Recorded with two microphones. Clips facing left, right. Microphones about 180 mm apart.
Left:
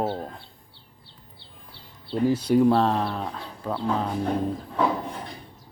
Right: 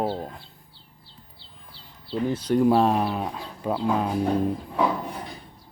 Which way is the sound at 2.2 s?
10° left (ahead or behind).